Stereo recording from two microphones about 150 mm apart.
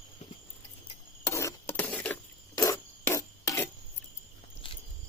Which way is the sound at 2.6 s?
20° left (ahead or behind).